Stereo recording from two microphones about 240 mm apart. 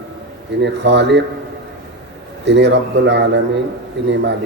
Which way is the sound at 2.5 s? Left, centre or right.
Right.